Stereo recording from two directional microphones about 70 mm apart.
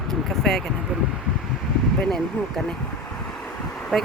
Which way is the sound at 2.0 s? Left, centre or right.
Centre.